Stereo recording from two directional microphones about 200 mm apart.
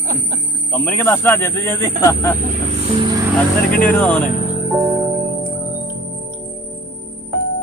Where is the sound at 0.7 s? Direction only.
10° left (ahead or behind).